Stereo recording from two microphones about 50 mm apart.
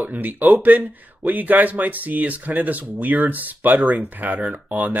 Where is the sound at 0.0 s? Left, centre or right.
Right.